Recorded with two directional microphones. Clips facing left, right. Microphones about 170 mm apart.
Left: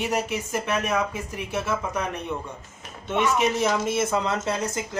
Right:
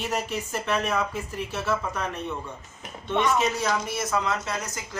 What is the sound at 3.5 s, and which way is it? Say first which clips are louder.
Speech: left 4 dB; 20° left (ahead or behind).